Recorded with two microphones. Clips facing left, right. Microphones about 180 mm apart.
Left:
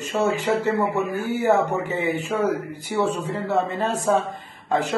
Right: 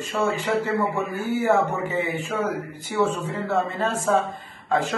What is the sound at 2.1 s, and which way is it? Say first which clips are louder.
Speech: left 3 dB; 15° left (ahead or behind).